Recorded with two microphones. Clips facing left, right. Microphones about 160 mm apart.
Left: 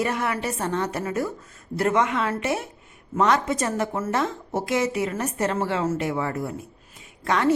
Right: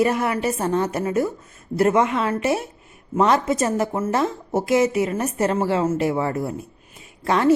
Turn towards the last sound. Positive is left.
turn(degrees=-25)  # may be behind; listen again after turning